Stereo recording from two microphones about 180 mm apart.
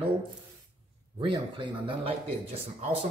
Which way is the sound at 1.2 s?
30° right (ahead or behind).